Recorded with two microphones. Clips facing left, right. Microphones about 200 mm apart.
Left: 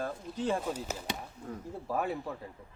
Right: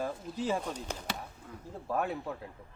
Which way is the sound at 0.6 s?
5° left (ahead or behind).